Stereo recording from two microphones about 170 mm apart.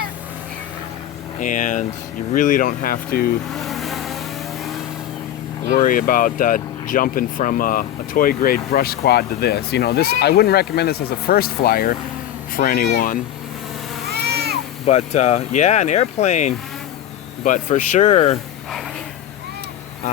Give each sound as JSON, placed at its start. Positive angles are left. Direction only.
{"t": 1.4, "sound": "speech", "side_deg": 50}
{"t": 3.5, "sound": "music", "side_deg": 0}
{"t": 5.7, "sound": "speech", "side_deg": 55}
{"t": 14.2, "sound": "a sound", "side_deg": -70}
{"t": 14.8, "sound": "speech", "side_deg": 40}